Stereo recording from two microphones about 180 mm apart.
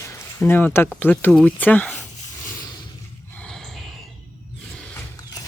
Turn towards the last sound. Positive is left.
turn(degrees=0)  # may be behind; listen again after turning